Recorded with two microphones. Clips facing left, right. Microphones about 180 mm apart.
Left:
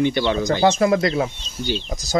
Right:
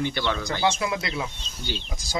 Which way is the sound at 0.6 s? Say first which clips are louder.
Left 10 dB; 45° left (ahead or behind).